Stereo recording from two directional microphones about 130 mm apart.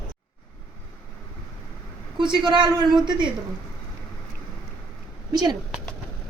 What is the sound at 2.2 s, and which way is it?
A man's voice, 35° right (ahead or behind).